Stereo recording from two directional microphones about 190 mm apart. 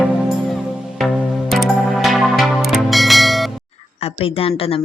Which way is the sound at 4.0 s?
30° left (ahead or behind).